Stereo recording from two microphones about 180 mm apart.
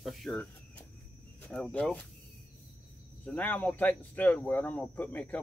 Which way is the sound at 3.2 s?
10° left (ahead or behind).